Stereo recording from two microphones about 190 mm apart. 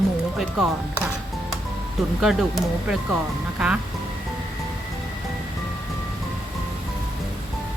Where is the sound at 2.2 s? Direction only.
Centre (ahead or behind).